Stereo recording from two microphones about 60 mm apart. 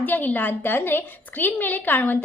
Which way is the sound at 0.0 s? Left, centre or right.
Left.